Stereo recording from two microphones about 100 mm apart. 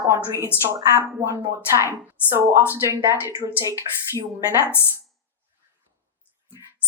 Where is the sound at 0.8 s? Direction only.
30° right (ahead or behind).